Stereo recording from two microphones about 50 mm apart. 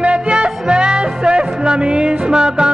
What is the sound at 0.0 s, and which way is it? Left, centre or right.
Music, right.